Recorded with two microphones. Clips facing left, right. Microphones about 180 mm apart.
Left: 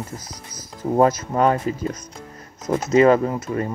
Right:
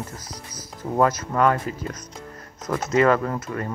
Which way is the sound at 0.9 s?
25° left (ahead or behind).